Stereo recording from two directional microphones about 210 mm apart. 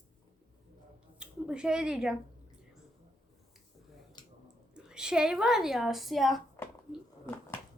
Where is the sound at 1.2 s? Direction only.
5° right (ahead or behind).